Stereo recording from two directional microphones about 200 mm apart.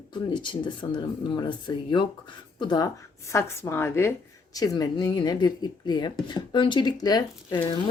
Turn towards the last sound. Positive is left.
turn(degrees=20)  # may be behind; listen again after turning